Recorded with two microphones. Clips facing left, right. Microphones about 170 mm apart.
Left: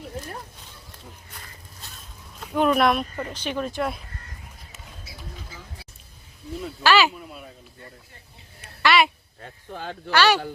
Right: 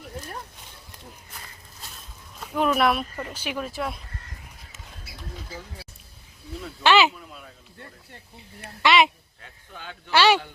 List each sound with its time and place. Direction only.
2.4 s speech: centre (ahead or behind)
6.8 s speech: 20° right (ahead or behind)
8.8 s a woman's voice: 20° right (ahead or behind)
9.4 s speech: 40° left (ahead or behind)
10.1 s speech: 20° right (ahead or behind)